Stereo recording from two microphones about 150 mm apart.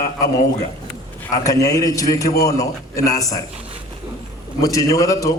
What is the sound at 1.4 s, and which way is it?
A man's voice, 20° left (ahead or behind).